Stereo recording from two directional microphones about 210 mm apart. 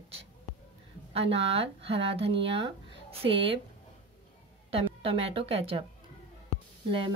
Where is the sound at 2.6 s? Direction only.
25° right (ahead or behind).